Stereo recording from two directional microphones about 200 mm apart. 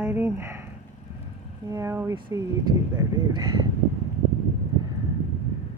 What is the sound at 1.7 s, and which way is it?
Speech, 15° right (ahead or behind).